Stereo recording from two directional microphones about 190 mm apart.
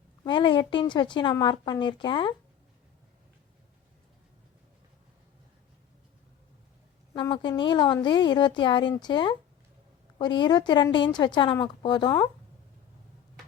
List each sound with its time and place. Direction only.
0.3 s a woman's voice: 25° left (ahead or behind)
7.1 s a woman's voice: 25° left (ahead or behind)